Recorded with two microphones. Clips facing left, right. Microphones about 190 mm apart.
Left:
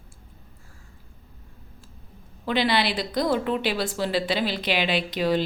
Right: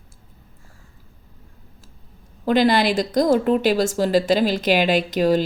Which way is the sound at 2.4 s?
45° right (ahead or behind).